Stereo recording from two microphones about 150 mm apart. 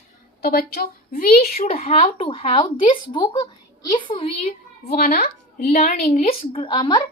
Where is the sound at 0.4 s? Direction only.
90° left.